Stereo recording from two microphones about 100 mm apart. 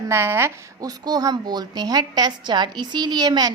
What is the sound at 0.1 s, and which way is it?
Speech, 25° right (ahead or behind).